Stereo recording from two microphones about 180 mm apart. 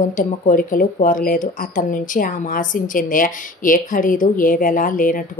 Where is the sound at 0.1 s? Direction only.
50° left (ahead or behind).